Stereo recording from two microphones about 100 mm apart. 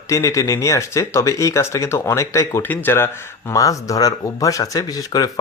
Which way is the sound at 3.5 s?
35° left (ahead or behind).